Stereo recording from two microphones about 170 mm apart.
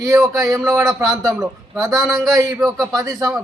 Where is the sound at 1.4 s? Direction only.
Centre (ahead or behind).